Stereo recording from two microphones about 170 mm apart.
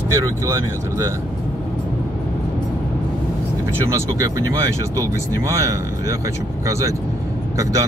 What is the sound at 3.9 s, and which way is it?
Speech, 20° right (ahead or behind).